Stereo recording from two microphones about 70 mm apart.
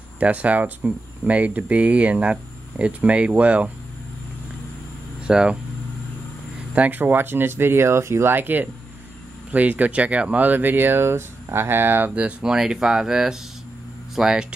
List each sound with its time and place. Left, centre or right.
0.2 s speech: right
5.2 s speech: centre
6.7 s speech: right